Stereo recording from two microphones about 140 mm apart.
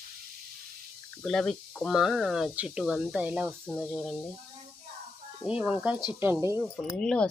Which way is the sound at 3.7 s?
10° left (ahead or behind).